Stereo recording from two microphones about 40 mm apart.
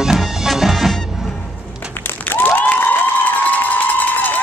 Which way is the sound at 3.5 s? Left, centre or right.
Left.